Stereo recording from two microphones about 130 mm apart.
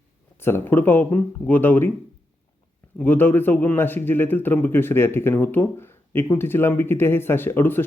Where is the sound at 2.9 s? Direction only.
15° left (ahead or behind).